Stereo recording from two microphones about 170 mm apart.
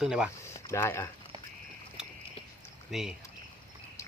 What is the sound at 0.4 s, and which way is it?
Speech, 15° left (ahead or behind).